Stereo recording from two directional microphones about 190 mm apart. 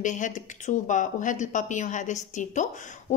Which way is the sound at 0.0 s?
40° left (ahead or behind).